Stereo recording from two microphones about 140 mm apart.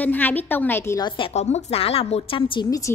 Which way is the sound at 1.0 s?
35° left (ahead or behind).